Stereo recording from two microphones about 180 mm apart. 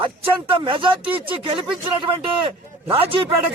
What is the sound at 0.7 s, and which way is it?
Speech, 30° right (ahead or behind).